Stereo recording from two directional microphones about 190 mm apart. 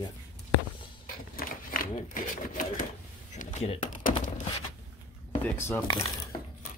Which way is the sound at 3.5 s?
40° left (ahead or behind).